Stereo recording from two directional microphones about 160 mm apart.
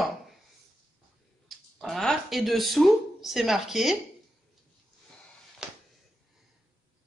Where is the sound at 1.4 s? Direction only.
Centre (ahead or behind).